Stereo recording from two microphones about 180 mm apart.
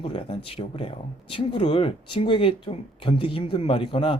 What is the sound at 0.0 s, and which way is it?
Speech, 30° left (ahead or behind).